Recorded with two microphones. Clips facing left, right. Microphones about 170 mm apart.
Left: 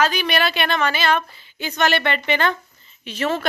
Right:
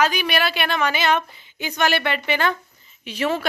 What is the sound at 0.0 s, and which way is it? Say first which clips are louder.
A woman's voice: left 1 dB; 10° right (ahead or behind).